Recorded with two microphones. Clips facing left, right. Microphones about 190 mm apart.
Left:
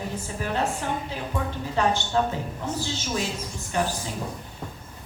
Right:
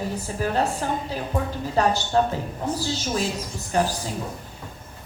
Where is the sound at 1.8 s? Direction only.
40° right (ahead or behind).